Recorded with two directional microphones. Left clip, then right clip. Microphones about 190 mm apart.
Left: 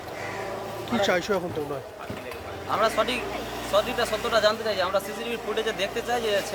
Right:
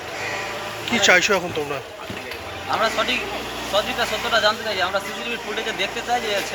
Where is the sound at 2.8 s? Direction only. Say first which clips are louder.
Right 3 dB; 25° left (ahead or behind).